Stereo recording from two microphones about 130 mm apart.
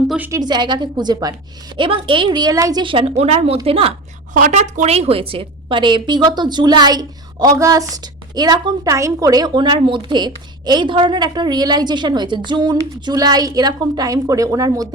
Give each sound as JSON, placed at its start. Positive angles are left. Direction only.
{"t": 0.2, "sound": "a woman's voice", "side_deg": -25}
{"t": 2.8, "sound": "speech", "side_deg": -45}
{"t": 4.4, "sound": "a woman's voice", "side_deg": -70}